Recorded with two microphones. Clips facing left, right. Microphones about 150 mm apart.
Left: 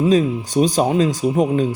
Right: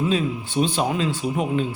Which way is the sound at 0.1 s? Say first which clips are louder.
Left 7 dB; 40° left (ahead or behind).